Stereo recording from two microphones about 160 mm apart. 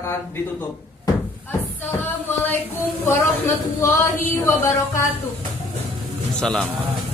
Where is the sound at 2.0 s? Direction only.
10° left (ahead or behind).